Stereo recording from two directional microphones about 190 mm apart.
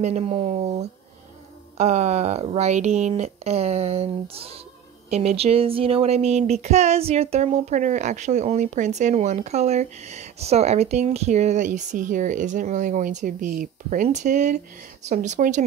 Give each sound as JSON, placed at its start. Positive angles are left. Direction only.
{"t": 0.0, "sound": "speech", "side_deg": -35}